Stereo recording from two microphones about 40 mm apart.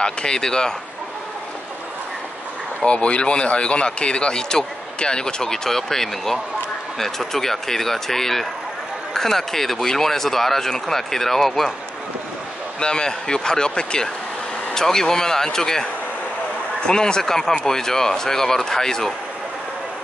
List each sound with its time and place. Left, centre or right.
0.0 s speech: centre
2.8 s speech: left; by 11.7 s centre
12.8 s speech: left